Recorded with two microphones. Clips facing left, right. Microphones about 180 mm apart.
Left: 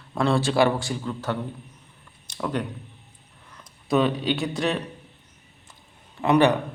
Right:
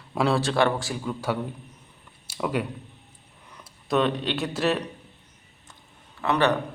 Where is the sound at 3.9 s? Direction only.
Centre (ahead or behind).